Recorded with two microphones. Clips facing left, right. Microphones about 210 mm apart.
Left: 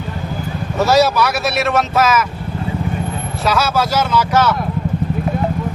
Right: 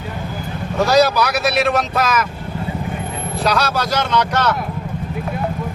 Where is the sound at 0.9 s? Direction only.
Centre (ahead or behind).